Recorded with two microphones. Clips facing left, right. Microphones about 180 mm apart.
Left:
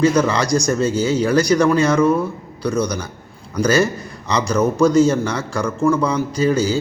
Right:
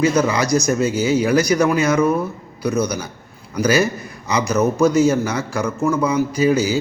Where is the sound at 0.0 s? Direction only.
10° right (ahead or behind).